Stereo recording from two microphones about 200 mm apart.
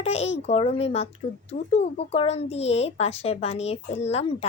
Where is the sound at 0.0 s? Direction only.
30° left (ahead or behind).